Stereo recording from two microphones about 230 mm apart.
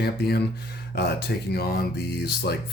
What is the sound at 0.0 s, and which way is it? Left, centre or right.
Speech, left.